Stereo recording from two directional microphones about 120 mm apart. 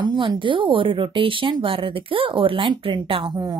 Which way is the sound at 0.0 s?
40° right (ahead or behind).